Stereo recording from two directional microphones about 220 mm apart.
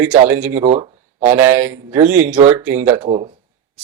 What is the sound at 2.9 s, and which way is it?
Speech, 30° right (ahead or behind).